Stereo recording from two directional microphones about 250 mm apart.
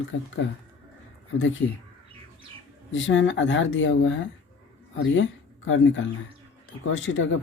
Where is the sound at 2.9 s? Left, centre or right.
Left.